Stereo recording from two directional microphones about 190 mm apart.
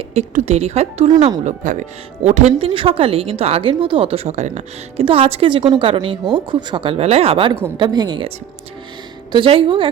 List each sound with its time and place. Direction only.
0.1 s speech: 35° right (ahead or behind)
9.3 s speech: 25° right (ahead or behind)